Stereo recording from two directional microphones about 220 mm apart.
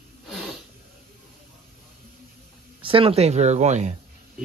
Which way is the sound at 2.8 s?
25° right (ahead or behind).